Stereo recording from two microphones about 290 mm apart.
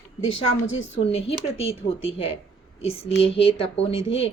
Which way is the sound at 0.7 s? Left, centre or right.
Left.